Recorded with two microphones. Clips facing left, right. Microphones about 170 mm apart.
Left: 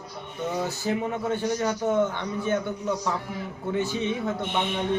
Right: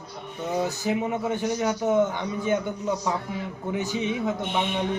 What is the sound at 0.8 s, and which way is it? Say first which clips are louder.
A man's voice: right 1 dB; 15° right (ahead or behind).